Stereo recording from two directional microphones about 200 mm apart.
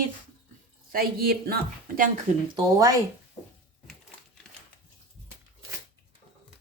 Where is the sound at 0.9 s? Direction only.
45° right (ahead or behind).